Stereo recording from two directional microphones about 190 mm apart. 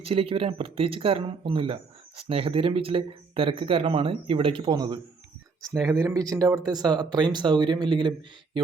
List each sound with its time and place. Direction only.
0.0 s speech: 30° right (ahead or behind)